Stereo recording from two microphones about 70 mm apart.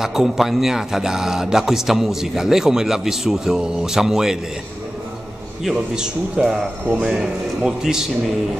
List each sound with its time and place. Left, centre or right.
0.0 s a man's voice: centre
5.6 s a man's voice: centre